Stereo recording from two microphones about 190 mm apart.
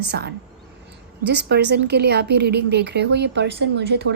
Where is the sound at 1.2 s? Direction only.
65° right (ahead or behind).